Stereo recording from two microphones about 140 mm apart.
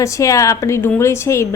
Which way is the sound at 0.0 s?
25° left (ahead or behind).